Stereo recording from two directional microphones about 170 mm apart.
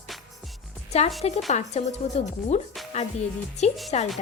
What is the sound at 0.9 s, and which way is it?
A woman's voice, 40° left (ahead or behind).